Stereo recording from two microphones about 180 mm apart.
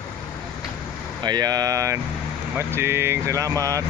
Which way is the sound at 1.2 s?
20° right (ahead or behind).